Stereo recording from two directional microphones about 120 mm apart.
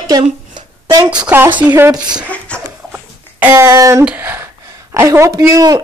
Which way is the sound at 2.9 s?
15° right (ahead or behind).